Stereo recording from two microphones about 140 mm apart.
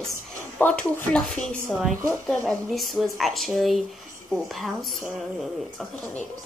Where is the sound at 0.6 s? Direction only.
10° left (ahead or behind).